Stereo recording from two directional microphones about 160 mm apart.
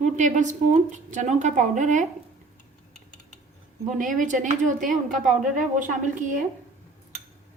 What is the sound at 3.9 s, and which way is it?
A woman's voice, 55° right (ahead or behind).